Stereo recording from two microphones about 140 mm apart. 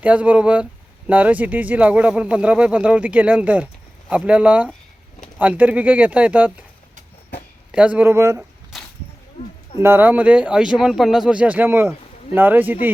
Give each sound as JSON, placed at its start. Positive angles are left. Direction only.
{"t": 0.0, "sound": "speech", "side_deg": -10}
{"t": 7.7, "sound": "speech", "side_deg": -10}
{"t": 8.7, "sound": "whip", "side_deg": 0}
{"t": 9.4, "sound": "speech", "side_deg": 50}
{"t": 9.8, "sound": "speech", "side_deg": -15}